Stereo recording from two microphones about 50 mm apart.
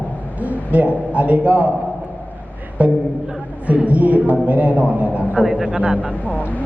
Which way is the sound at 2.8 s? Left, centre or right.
Right.